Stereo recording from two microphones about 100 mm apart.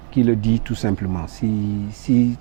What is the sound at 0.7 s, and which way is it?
Speech, 15° right (ahead or behind).